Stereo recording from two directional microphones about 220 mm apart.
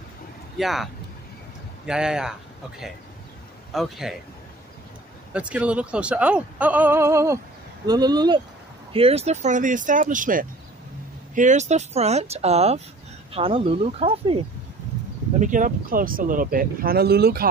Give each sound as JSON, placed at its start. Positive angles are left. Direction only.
{"t": 0.6, "sound": "speech", "side_deg": 0}
{"t": 1.9, "sound": "speech", "side_deg": -5}
{"t": 3.7, "sound": "speech", "side_deg": 0}
{"t": 5.3, "sound": "speech", "side_deg": -5}